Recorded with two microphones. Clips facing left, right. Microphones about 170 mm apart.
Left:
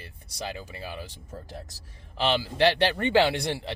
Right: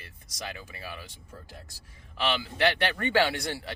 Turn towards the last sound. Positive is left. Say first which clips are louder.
# left 3 dB
turn(degrees=25)  # may be behind; listen again after turning